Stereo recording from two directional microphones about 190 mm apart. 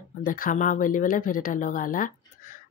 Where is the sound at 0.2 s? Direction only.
45° left (ahead or behind).